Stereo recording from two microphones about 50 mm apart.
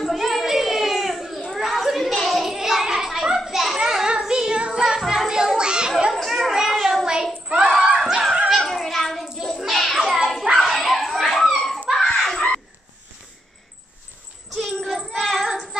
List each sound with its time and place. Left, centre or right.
0.1 s a sound: centre
3.3 s child singing: centre
5.0 s a sound: centre
5.6 s children playing: centre
6.1 s chatter: centre
6.7 s child singing: centre
7.6 s screaming: centre
8.6 s cat: centre
9.2 s hands: centre
9.6 s children playing: centre
10.5 s dog: centre
12.2 s a sound: centre
14.5 s a sound: centre
14.9 s child singing: centre